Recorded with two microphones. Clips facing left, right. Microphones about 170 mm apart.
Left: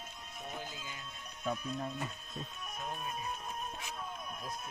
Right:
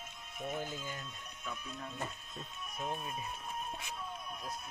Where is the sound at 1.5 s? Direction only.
40° left (ahead or behind).